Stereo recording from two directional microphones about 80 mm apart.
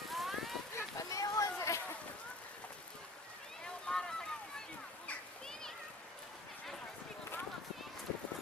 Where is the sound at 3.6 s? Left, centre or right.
Centre.